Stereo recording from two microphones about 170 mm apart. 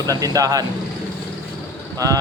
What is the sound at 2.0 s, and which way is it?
Mantra, 20° right (ahead or behind).